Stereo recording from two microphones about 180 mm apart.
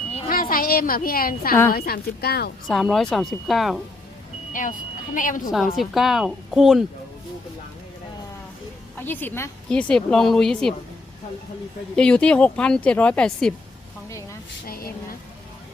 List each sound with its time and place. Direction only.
0.3 s a woman's voice: 50° left (ahead or behind)
2.6 s speech: centre (ahead or behind)
5.1 s a woman's voice: 45° left (ahead or behind)
5.7 s speech: centre (ahead or behind)
9.0 s speech: 10° left (ahead or behind)
11.9 s speech: 5° left (ahead or behind)
14.7 s speech: 55° left (ahead or behind)